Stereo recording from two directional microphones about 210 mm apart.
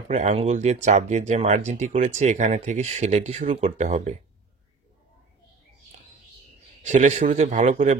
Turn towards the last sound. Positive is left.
turn(degrees=-35)  # may be behind; listen again after turning